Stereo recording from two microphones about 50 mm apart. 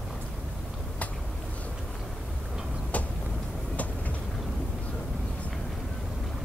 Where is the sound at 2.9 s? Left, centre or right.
Left.